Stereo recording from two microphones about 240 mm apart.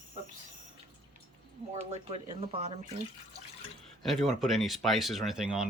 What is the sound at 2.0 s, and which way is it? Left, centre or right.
Speech, right.